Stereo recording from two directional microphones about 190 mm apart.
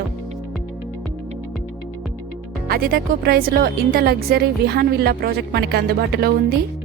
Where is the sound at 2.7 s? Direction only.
50° right (ahead or behind).